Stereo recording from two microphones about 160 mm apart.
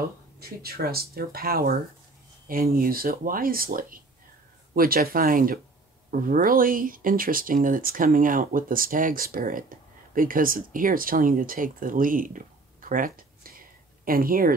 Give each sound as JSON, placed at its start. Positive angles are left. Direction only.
{"t": 0.4, "sound": "speech", "side_deg": -75}